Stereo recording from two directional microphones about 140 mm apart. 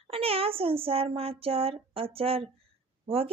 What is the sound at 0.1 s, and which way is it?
Speech, 45° right (ahead or behind).